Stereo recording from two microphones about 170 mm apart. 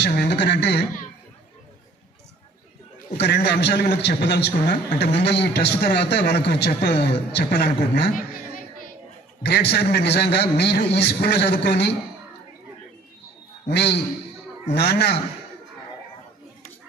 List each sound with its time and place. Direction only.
0.0 s a man's voice: 80° left
3.2 s a man's voice: 75° left (ahead or behind)
9.4 s a man's voice: 80° left
13.7 s a man's voice: 80° left